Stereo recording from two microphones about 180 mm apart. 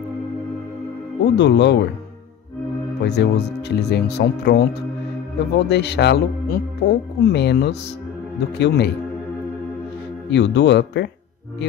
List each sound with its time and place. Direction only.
1.2 s speech: 70° left (ahead or behind)
3.0 s speech: 70° left (ahead or behind)
5.7 s speech: 70° left (ahead or behind)
10.3 s speech: 70° left (ahead or behind)